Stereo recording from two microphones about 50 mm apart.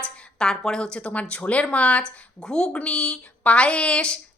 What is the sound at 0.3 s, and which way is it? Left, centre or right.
A woman's voice, centre.